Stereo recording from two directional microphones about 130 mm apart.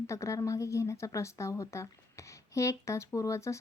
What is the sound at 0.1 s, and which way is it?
Speech, 25° left (ahead or behind).